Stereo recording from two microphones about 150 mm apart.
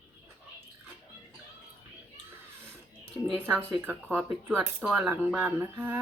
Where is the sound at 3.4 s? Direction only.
10° right (ahead or behind).